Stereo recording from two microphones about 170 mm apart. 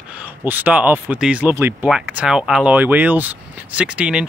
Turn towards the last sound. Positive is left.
turn(degrees=-5)  # may be behind; listen again after turning